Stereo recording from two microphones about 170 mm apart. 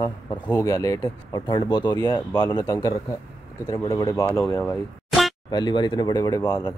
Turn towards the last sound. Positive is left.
turn(degrees=25)  # may be behind; listen again after turning